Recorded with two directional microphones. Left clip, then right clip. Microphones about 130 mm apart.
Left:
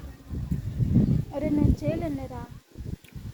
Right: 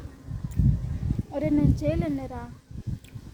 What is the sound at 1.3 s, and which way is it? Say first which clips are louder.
Speech: right 4 dB; 25° right (ahead or behind).